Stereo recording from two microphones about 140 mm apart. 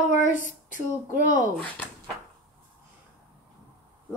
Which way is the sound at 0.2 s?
65° left (ahead or behind).